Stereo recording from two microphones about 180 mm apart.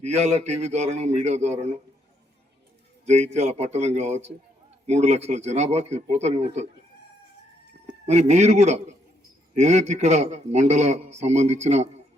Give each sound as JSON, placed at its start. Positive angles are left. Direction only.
{"t": 0.0, "sound": "a man's voice", "side_deg": -40}
{"t": 3.1, "sound": "a man's voice", "side_deg": -40}
{"t": 8.0, "sound": "a man's voice", "side_deg": -40}